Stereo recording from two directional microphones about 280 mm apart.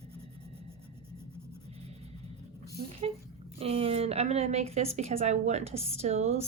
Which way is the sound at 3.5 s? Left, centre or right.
Right.